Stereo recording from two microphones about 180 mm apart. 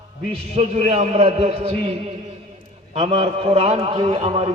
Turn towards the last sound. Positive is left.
turn(degrees=-30)  # may be behind; listen again after turning